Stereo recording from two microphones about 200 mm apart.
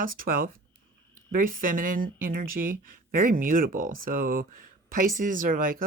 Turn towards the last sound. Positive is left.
turn(degrees=-45)  # may be behind; listen again after turning